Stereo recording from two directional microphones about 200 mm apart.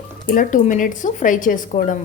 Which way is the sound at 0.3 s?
40° left (ahead or behind).